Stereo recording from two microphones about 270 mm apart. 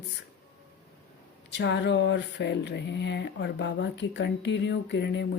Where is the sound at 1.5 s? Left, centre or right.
Left.